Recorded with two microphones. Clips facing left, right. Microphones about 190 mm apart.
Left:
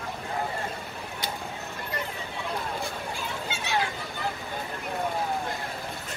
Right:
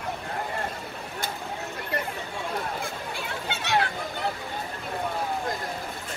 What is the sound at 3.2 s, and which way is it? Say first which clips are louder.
Chatter: right 1 dB; 65° right (ahead or behind).